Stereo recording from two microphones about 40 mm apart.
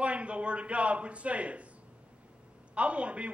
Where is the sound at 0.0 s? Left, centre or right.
Right.